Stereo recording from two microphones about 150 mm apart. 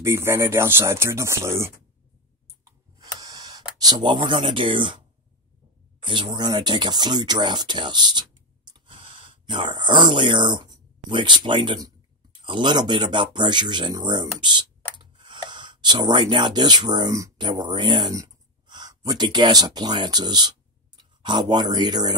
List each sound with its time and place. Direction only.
0.0 s speech: 20° right (ahead or behind)
3.2 s camera: 25° right (ahead or behind)
3.8 s speech: 30° right (ahead or behind)
6.0 s speech: 30° right (ahead or behind)